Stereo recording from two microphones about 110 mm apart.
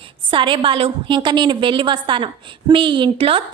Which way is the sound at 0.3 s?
50° right (ahead or behind).